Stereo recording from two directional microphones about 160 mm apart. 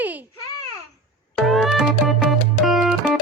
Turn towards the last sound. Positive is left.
turn(degrees=0)  # may be behind; listen again after turning